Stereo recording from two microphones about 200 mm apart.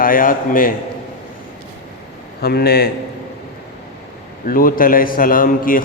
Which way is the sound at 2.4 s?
50° left (ahead or behind).